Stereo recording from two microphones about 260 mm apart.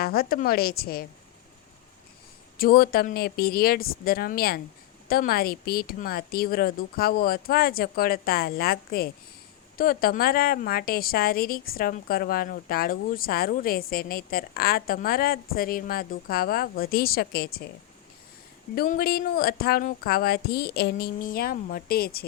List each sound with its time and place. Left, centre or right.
0.0 s a woman's voice: left
2.6 s a woman's voice: left
18.7 s a woman's voice: left